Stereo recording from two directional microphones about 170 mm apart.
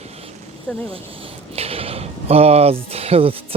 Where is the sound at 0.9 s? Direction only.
35° right (ahead or behind).